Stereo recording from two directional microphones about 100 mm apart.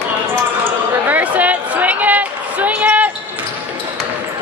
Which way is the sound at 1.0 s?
15° right (ahead or behind).